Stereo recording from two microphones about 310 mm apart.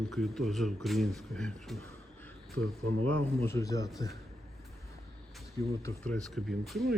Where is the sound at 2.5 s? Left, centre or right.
Right.